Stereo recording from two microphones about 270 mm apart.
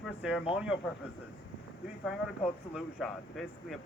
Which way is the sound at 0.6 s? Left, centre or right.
Centre.